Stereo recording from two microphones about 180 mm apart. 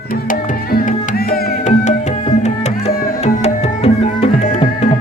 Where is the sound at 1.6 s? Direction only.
40° left (ahead or behind).